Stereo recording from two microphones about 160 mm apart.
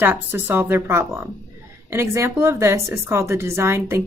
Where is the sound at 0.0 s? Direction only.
15° right (ahead or behind).